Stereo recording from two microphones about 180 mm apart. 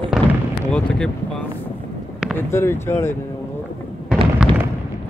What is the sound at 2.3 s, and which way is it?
Speech, 15° left (ahead or behind).